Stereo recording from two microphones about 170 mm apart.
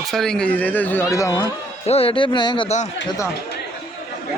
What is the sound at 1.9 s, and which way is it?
Speech, 35° left (ahead or behind).